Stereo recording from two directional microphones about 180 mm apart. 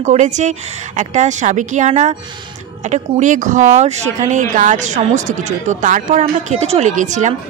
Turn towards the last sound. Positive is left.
turn(degrees=-40)  # may be behind; listen again after turning